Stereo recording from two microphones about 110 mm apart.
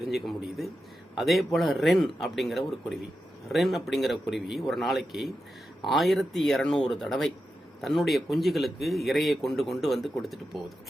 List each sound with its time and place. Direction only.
0.0 s speech: centre (ahead or behind)